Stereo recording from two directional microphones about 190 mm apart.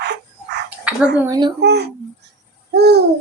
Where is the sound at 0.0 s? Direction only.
60° right (ahead or behind).